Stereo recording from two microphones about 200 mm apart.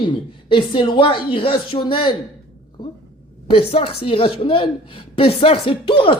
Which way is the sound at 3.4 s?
30° left (ahead or behind).